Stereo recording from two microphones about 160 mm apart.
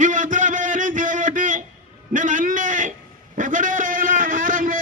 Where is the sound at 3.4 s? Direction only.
55° right (ahead or behind).